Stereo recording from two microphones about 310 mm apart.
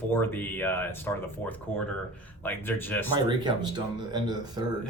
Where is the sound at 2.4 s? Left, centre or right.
Centre.